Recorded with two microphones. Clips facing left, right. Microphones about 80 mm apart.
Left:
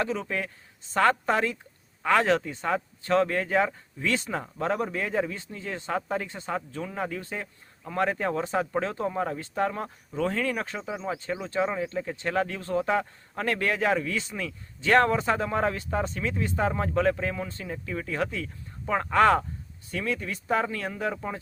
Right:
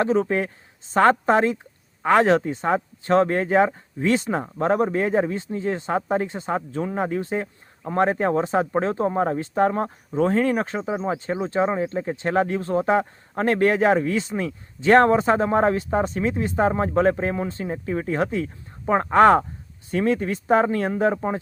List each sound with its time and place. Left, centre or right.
0.0 s speech: right